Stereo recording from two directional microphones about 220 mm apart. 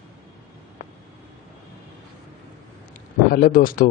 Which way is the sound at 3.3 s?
40° left (ahead or behind).